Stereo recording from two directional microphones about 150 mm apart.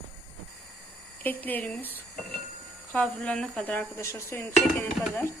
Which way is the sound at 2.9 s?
5° left (ahead or behind).